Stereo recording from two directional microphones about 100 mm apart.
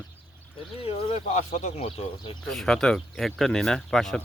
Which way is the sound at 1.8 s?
75° left (ahead or behind).